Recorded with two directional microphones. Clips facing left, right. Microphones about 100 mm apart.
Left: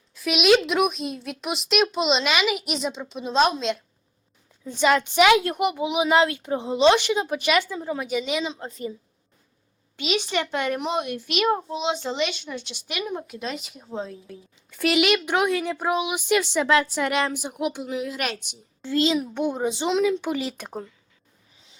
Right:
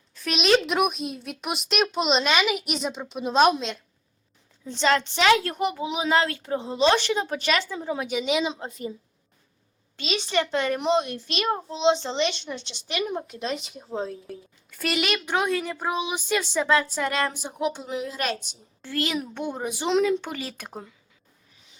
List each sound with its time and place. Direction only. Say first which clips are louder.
0.1 s a woman's voice: left 3 dB; 5° left (ahead or behind)
4.7 s a woman's voice: left 2 dB; 10° left (ahead or behind)
7.8 s a woman's voice: left 1 dB; centre (ahead or behind)
10.0 s a woman's voice: even; 15° left (ahead or behind)
13.9 s a woman's voice: right 2 dB; 35° right (ahead or behind)
14.8 s a woman's voice: left 6 dB; 10° left (ahead or behind)
17.8 s a woman's voice: left 1 dB; 30° right (ahead or behind)
18.4 s a woman's voice: left 7 dB; 20° left (ahead or behind)
19.9 s a woman's voice: right 1 dB; centre (ahead or behind)
20.2 s a woman's voice: left 7 dB; 15° left (ahead or behind)